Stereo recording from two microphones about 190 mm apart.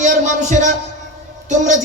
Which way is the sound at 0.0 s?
40° right (ahead or behind).